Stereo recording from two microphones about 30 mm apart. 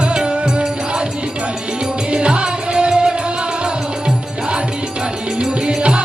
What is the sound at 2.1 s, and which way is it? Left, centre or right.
Music, right.